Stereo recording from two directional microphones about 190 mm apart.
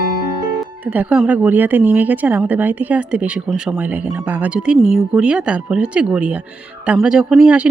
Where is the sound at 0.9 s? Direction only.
5° right (ahead or behind).